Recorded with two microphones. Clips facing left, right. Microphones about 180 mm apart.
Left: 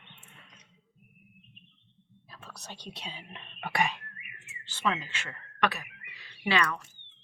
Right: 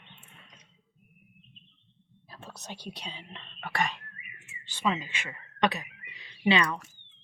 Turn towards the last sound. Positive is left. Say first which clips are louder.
# right 3 dB
turn(degrees=-20)  # may be behind; listen again after turning